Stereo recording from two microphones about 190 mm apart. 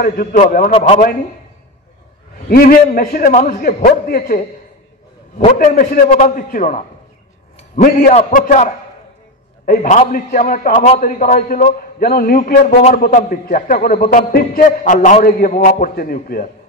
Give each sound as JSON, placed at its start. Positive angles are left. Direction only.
{"t": 0.0, "sound": "a man's voice", "side_deg": 50}
{"t": 0.7, "sound": "a man's voice", "side_deg": 30}
{"t": 2.3, "sound": "a man's voice", "side_deg": 50}
{"t": 5.6, "sound": "a man's voice", "side_deg": 45}
{"t": 7.5, "sound": "a sound", "side_deg": 35}
{"t": 8.1, "sound": "a man's voice", "side_deg": 40}